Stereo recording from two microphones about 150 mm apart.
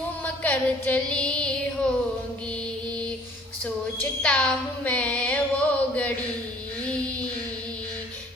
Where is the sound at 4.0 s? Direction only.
10° left (ahead or behind).